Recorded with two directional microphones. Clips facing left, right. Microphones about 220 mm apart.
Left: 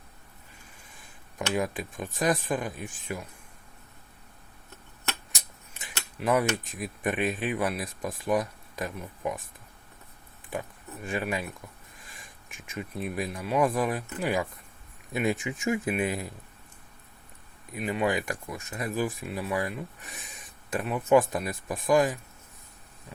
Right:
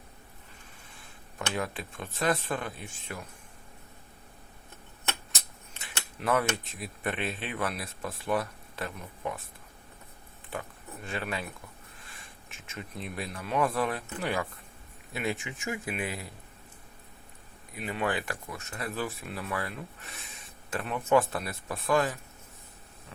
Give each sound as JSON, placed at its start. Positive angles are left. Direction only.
{"t": 1.4, "sound": "speech", "side_deg": 15}
{"t": 6.2, "sound": "speech", "side_deg": 15}
{"t": 10.5, "sound": "speech", "side_deg": 15}
{"t": 12.5, "sound": "speech", "side_deg": 15}
{"t": 17.8, "sound": "speech", "side_deg": 15}